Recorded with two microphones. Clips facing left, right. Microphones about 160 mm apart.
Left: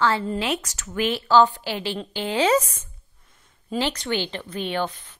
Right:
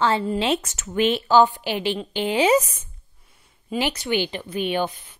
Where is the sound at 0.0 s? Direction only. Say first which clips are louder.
Right 2 dB; 20° right (ahead or behind).